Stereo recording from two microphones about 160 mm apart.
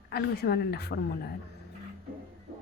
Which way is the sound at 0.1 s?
80° left.